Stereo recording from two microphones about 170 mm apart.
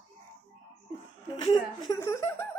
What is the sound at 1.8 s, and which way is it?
Laughter, 15° left (ahead or behind).